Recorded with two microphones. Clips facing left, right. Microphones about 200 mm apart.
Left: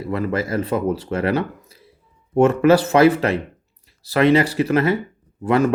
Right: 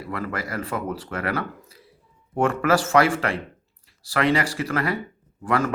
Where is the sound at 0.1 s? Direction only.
20° left (ahead or behind).